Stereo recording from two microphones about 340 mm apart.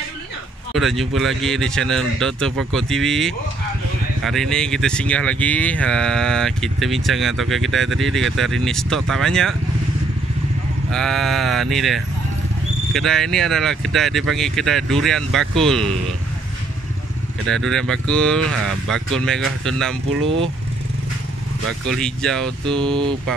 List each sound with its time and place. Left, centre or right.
0.7 s speech: centre
10.9 s speech: centre
17.5 s speech: centre
20.1 s speech: right
21.6 s speech: centre